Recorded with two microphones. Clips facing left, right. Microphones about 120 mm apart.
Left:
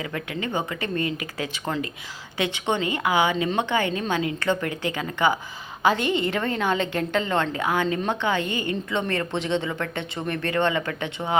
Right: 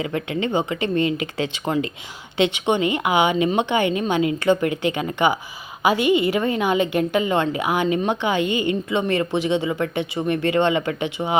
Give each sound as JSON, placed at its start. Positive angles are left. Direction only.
{"t": 0.0, "sound": "speech", "side_deg": -25}